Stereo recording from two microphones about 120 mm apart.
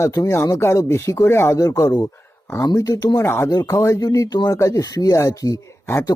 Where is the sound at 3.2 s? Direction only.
20° left (ahead or behind).